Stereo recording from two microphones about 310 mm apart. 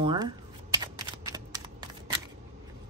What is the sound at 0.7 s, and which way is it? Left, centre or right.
Shuffling cards, centre.